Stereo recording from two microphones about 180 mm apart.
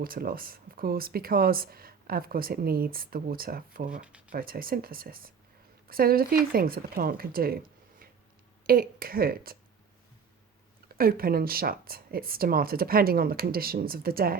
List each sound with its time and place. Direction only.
0.0 s speech: 55° right (ahead or behind)
10.8 s speech: 55° right (ahead or behind)